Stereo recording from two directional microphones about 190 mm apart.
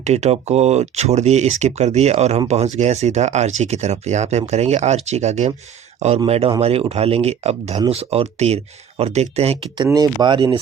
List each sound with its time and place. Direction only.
0.0 s speech: 35° right (ahead or behind)
9.9 s speech: 20° right (ahead or behind)